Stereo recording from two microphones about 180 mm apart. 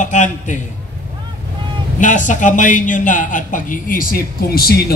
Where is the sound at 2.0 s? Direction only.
45° left (ahead or behind).